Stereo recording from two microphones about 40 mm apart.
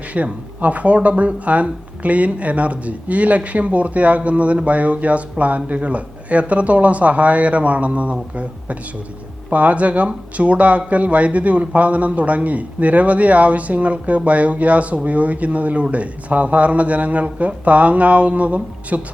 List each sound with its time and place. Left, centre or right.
0.1 s speech: right
9.5 s speech: right